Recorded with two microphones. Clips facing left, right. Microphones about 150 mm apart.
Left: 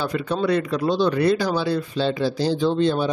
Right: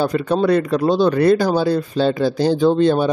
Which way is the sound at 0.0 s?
45° right (ahead or behind).